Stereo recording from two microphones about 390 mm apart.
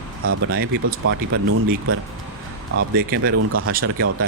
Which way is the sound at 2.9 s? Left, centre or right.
Right.